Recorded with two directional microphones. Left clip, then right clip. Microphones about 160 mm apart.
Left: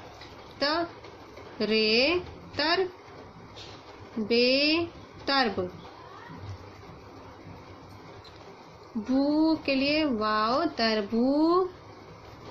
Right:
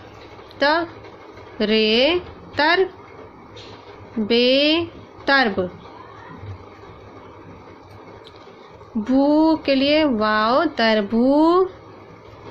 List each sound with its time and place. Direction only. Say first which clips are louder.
0.6 s a woman's voice: right 9 dB; 30° right (ahead or behind)
4.3 s speech: right 7 dB; 30° right (ahead or behind)
9.0 s speech: right 9 dB; 35° right (ahead or behind)